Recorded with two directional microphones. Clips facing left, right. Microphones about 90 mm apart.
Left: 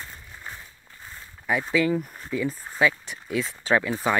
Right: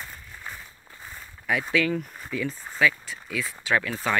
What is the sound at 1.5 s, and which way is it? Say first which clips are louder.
Speech: left 2 dB; 5° left (ahead or behind).